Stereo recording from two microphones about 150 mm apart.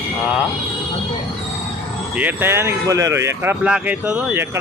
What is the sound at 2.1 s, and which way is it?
Speech, 15° right (ahead or behind).